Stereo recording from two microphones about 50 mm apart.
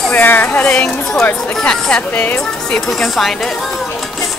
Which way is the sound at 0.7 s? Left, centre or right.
Centre.